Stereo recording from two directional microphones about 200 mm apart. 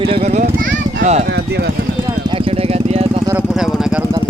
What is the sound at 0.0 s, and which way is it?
Speech, 30° right (ahead or behind).